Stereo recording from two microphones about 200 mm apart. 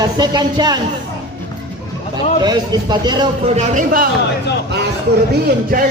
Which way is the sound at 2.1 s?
20° right (ahead or behind).